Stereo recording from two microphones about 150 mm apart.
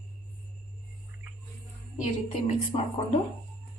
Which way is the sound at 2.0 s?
50° left (ahead or behind).